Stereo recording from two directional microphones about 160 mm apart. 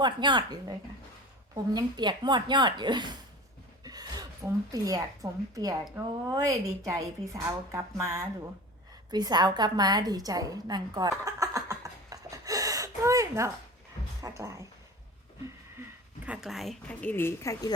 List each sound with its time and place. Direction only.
0.0 s a woman's voice: 30° right (ahead or behind)
1.7 s a woman's voice: 30° right (ahead or behind)
11.3 s a sound: 20° right (ahead or behind)
14.2 s a woman's voice: 20° right (ahead or behind)
16.2 s a woman's voice: 5° right (ahead or behind); by 17.7 s 20° left (ahead or behind)